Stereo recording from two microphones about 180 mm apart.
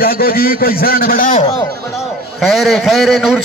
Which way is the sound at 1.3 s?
30° left (ahead or behind).